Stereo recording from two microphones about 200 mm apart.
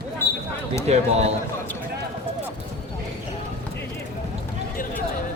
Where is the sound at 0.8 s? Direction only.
30° right (ahead or behind).